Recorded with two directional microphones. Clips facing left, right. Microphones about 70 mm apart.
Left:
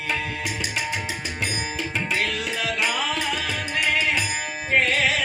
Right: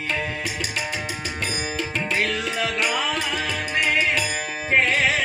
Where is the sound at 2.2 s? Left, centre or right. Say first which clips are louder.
Right 2 dB; right.